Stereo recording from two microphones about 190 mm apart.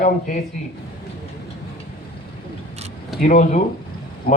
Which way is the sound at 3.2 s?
40° left (ahead or behind).